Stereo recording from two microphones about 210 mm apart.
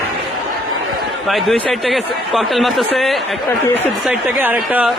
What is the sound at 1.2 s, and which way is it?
Speech, centre (ahead or behind).